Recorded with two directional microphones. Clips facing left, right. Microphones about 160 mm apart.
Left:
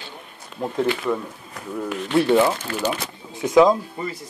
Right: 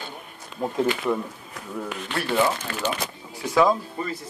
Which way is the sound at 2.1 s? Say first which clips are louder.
Left 6 dB; 15° left (ahead or behind).